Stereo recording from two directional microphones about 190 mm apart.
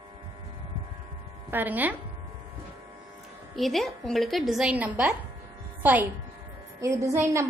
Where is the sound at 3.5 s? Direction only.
Centre (ahead or behind); by 7.4 s 15° right (ahead or behind).